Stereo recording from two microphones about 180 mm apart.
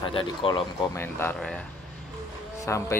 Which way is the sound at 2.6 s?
15° left (ahead or behind).